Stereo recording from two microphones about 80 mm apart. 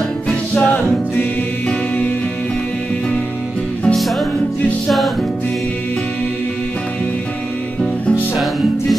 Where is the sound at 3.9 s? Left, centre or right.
Centre.